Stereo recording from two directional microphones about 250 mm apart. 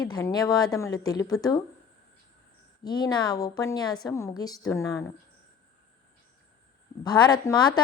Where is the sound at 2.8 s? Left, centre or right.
Centre.